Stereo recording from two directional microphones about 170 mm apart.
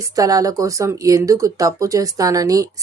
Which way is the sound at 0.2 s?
20° right (ahead or behind).